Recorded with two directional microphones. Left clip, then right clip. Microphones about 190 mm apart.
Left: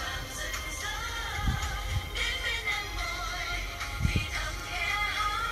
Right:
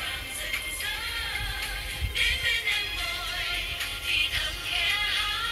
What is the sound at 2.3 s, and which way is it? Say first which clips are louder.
Music: right 5 dB; 25° right (ahead or behind).